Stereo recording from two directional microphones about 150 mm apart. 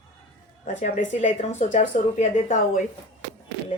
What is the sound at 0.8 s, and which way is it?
A woman's voice, 50° left (ahead or behind).